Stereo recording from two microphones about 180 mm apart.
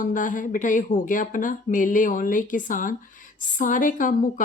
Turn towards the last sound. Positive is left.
turn(degrees=50)  # may be behind; listen again after turning